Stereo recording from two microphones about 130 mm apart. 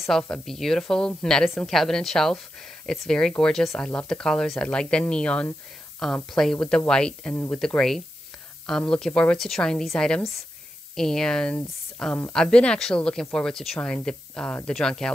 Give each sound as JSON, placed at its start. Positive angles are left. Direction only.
{"t": 0.3, "sound": "speech", "side_deg": 5}